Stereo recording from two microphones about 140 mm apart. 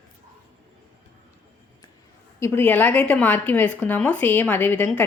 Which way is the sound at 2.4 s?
15° left (ahead or behind).